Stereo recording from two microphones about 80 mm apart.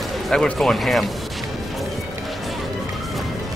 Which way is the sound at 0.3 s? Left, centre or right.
Centre.